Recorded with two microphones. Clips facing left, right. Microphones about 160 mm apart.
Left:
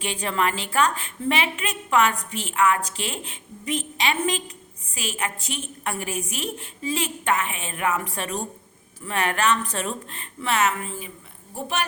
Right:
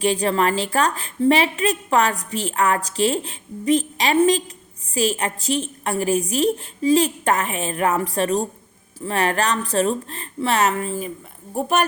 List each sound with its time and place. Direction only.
0.0 s a woman's voice: 35° right (ahead or behind)